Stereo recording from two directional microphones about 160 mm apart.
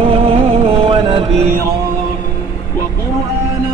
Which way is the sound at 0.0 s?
35° right (ahead or behind).